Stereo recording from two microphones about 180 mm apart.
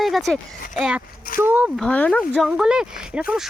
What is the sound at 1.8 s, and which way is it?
Speech, 5° left (ahead or behind).